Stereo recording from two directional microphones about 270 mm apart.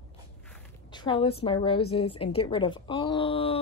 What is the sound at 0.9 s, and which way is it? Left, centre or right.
A woman's voice, centre.